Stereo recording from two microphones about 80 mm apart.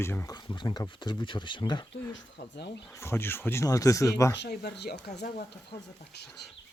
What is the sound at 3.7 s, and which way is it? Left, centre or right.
Speech, left.